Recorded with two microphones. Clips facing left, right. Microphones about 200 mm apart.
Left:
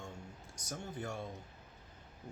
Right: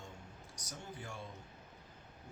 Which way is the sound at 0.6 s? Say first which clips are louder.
Left 6 dB; 45° left (ahead or behind).